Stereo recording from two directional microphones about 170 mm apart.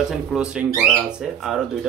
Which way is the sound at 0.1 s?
5° right (ahead or behind).